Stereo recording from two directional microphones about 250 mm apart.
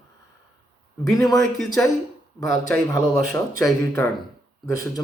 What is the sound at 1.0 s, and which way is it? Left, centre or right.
Speech, centre.